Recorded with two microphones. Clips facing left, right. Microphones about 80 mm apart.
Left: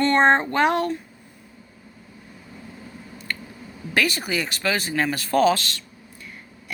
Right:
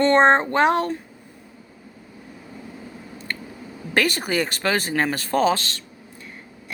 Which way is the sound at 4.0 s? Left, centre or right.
Right.